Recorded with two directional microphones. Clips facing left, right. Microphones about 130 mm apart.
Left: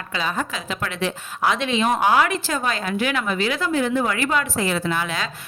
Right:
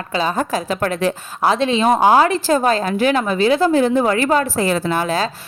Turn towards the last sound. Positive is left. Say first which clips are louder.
# right 6 dB
turn(degrees=-35)  # may be behind; listen again after turning